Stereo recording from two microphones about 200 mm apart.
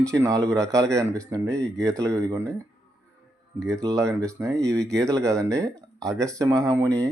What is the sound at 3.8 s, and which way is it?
Speech, 15° right (ahead or behind).